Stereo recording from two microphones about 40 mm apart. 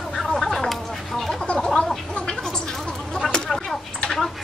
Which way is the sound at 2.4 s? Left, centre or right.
Centre.